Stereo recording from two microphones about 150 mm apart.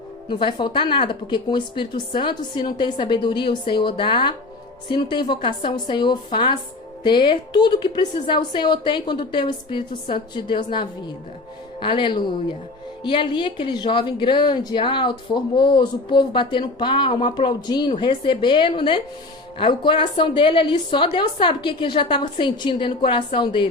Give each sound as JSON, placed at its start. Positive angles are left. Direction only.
{"t": 0.3, "sound": "a woman's voice", "side_deg": 35}